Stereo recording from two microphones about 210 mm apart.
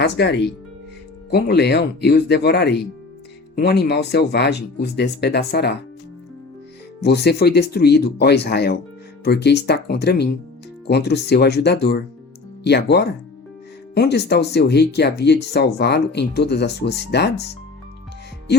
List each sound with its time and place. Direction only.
0.0 s speech: 55° left (ahead or behind)
7.0 s speech: 50° left (ahead or behind)